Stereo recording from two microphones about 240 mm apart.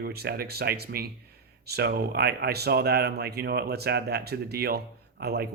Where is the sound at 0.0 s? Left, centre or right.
Right.